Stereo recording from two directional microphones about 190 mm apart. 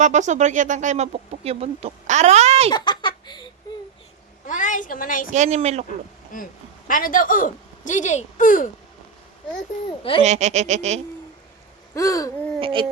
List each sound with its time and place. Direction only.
0.0 s speech: 40° right (ahead or behind)
2.7 s speech: 25° left (ahead or behind)
4.4 s a woman's voice: 40° left (ahead or behind)
5.3 s speech: 35° right (ahead or behind)
6.3 s a woman's voice: 45° left (ahead or behind)
10.0 s speech: 30° left (ahead or behind)
10.2 s speech: 35° right (ahead or behind)
11.9 s hoot: 15° left (ahead or behind)
12.5 s a sound: 30° right (ahead or behind)